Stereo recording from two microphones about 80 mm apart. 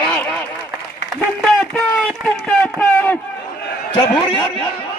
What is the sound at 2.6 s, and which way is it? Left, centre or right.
Speech, left.